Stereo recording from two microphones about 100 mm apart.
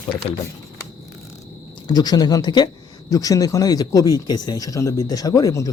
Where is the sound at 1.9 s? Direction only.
40° left (ahead or behind).